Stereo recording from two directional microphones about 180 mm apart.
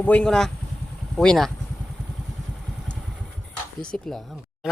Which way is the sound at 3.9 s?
5° left (ahead or behind).